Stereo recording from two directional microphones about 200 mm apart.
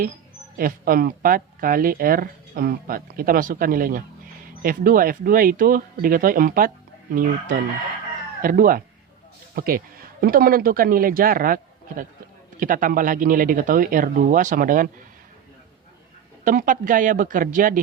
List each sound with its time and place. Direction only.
0.5 s a man's voice: 45° right (ahead or behind)
16.4 s speech: 40° right (ahead or behind)